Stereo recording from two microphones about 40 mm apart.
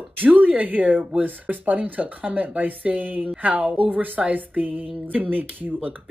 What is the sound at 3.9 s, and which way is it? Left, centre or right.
A woman's voice, right.